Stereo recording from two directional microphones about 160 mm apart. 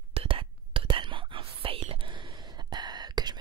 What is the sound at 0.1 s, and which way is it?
Whispering, 35° right (ahead or behind).